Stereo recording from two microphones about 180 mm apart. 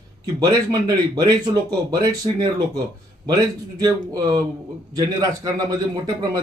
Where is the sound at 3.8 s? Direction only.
20° right (ahead or behind).